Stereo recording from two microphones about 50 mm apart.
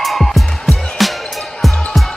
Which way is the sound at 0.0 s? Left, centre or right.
Centre.